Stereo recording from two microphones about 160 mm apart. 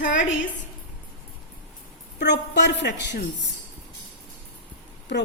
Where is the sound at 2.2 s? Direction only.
90° left.